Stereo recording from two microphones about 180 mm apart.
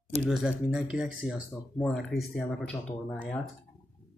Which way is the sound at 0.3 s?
5° right (ahead or behind).